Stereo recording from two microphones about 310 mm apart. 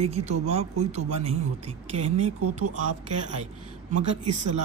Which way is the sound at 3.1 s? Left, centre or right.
Right.